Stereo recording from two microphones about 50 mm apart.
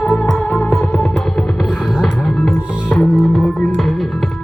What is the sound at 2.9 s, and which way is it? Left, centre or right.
Music, left.